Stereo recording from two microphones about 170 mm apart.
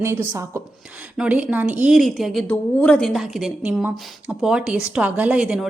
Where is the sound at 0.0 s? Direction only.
15° right (ahead or behind).